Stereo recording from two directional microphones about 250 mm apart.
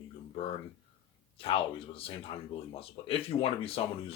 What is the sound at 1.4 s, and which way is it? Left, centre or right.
Speech, left.